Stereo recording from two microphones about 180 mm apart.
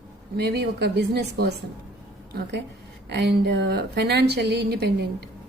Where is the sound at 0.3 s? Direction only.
65° right (ahead or behind).